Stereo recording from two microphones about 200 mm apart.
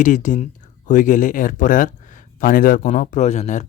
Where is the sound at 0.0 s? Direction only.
40° left (ahead or behind).